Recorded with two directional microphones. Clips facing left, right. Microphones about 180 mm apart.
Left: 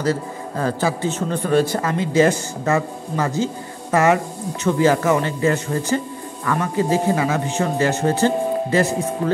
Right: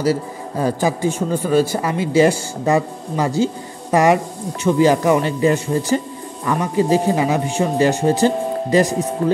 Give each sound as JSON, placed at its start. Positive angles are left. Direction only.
{"t": 0.0, "sound": "speech", "side_deg": -10}